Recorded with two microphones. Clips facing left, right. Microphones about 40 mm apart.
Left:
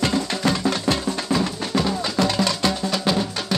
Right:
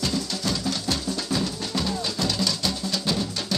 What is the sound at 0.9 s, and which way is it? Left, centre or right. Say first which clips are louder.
Music: left 5 dB; left.